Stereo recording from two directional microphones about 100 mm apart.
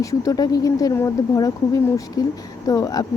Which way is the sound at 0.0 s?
35° left (ahead or behind).